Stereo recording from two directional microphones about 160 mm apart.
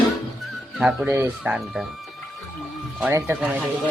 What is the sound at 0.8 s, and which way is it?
Speech, 5° right (ahead or behind).